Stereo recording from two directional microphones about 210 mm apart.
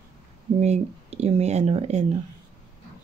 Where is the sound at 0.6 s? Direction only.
30° right (ahead or behind).